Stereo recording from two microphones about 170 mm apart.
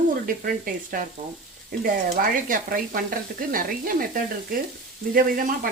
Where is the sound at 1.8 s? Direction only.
55° right (ahead or behind).